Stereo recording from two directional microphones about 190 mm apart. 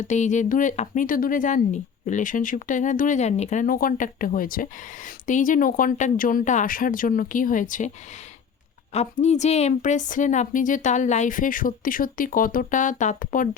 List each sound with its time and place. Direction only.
0.0 s speech: 40° left (ahead or behind)
8.9 s a woman's voice: 35° left (ahead or behind)